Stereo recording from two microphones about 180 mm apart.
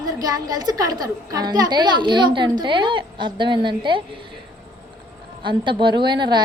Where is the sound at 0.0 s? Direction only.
20° right (ahead or behind).